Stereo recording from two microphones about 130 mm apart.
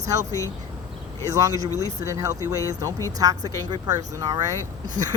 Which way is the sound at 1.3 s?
25° right (ahead or behind).